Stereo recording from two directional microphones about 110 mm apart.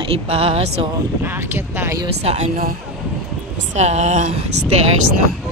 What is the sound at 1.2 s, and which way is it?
Speech, 20° right (ahead or behind).